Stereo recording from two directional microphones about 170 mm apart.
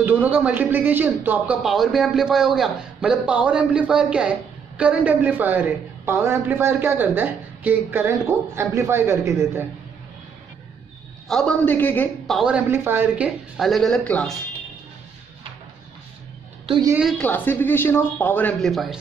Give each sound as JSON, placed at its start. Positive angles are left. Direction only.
{"t": 0.0, "sound": "a man's voice", "side_deg": -10}
{"t": 11.2, "sound": "speech", "side_deg": 5}
{"t": 12.4, "sound": "a man's voice", "side_deg": -5}
{"t": 13.6, "sound": "speech", "side_deg": 0}
{"t": 17.2, "sound": "speech", "side_deg": 10}